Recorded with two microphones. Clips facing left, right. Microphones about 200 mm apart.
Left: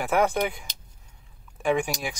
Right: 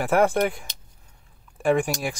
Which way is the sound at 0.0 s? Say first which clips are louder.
Right 3 dB; centre (ahead or behind).